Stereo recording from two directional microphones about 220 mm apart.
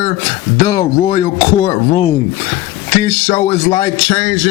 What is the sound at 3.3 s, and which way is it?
Speech, 25° left (ahead or behind).